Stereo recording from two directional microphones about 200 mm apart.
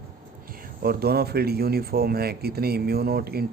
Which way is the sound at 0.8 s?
50° right (ahead or behind).